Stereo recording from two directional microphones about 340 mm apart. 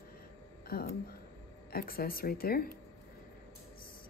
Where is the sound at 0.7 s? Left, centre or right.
Left.